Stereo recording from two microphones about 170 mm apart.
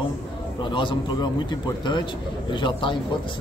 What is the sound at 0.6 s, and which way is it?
A man's voice, 30° left (ahead or behind).